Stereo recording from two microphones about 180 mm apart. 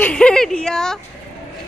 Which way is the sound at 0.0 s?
5° left (ahead or behind).